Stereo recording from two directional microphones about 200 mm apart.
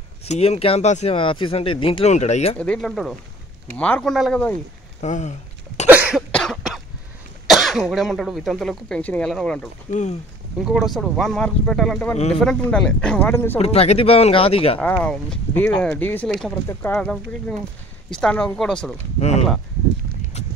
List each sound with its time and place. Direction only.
0.2 s speech: 30° left (ahead or behind)
2.6 s speech: 5° left (ahead or behind)
5.0 s speech: 35° left (ahead or behind)
5.9 s cough: 5° right (ahead or behind)
7.4 s speech: centre (ahead or behind)
9.8 s speech: 35° left (ahead or behind)
10.6 s speech: centre (ahead or behind)
13.6 s speech: 30° left (ahead or behind)
14.8 s speech: 5° left (ahead or behind)
19.1 s speech: 35° left (ahead or behind)
20.4 s clip-clop: 35° left (ahead or behind)